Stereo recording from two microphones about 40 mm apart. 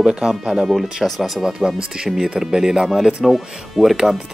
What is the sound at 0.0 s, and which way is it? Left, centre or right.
Speech, centre.